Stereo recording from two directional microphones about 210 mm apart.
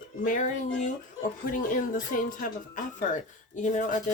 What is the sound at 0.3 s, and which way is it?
Speech, 35° left (ahead or behind).